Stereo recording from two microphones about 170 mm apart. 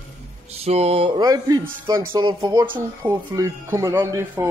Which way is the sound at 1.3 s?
20° right (ahead or behind).